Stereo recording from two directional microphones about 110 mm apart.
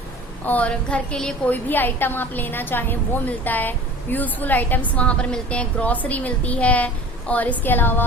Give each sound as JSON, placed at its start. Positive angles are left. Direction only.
{"t": 0.4, "sound": "a woman's voice", "side_deg": 15}